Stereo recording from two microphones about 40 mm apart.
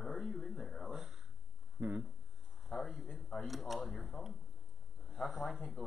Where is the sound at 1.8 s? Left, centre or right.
Right.